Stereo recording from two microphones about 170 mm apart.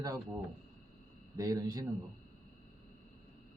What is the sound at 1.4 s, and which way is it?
Speech, 20° right (ahead or behind).